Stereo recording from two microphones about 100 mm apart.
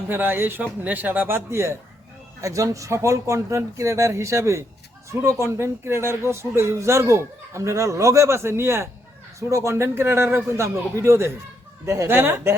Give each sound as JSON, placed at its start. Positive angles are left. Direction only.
{"t": 0.1, "sound": "a man's voice", "side_deg": -20}